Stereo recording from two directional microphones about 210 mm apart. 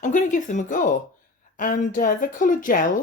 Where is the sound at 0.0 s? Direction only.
35° left (ahead or behind).